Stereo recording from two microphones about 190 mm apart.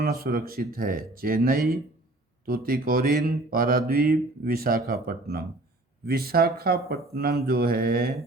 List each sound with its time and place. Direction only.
0.0 s mantra: 50° right (ahead or behind)